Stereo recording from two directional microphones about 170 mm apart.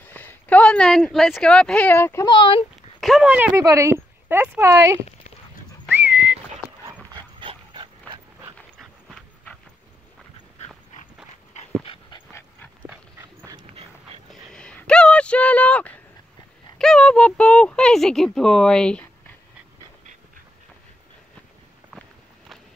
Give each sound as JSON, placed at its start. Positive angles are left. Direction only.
{"t": 0.0, "sound": "speech", "side_deg": 10}
{"t": 2.2, "sound": "speech", "side_deg": 30}
{"t": 3.0, "sound": "speech", "side_deg": 0}
{"t": 5.9, "sound": "whistling", "side_deg": -10}
{"t": 7.1, "sound": "dog", "side_deg": -30}
{"t": 8.5, "sound": "dog", "side_deg": 5}
{"t": 11.8, "sound": "dog", "side_deg": 30}
{"t": 12.8, "sound": "dog", "side_deg": -10}
{"t": 13.6, "sound": "dog", "side_deg": -35}
{"t": 14.3, "sound": "a sound", "side_deg": 5}
{"t": 16.7, "sound": "speech", "side_deg": 5}